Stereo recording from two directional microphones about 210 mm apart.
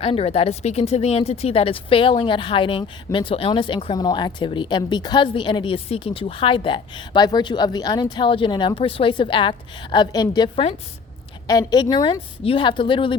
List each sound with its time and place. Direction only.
0.0 s speech: 25° left (ahead or behind)